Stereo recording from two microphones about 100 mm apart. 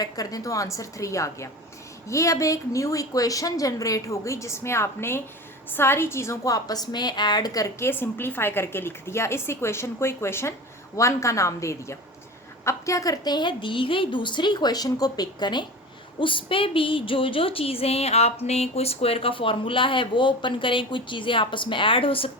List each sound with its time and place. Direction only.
0.0 s a woman's voice: 40° left (ahead or behind)
7.9 s a woman's voice: 25° left (ahead or behind); by 15.6 s 45° left (ahead or behind)
16.2 s speech: 60° left (ahead or behind)